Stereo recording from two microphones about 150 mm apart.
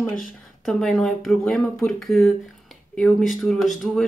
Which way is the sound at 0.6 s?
Centre (ahead or behind).